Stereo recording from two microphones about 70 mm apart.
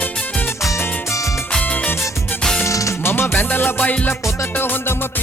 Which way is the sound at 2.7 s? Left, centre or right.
Left.